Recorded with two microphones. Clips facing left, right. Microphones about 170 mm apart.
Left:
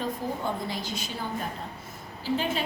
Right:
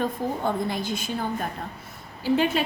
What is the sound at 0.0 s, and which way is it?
A woman's voice, 55° right (ahead or behind).